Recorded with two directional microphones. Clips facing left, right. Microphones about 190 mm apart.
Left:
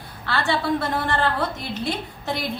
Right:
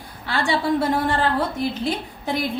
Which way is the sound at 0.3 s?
15° right (ahead or behind).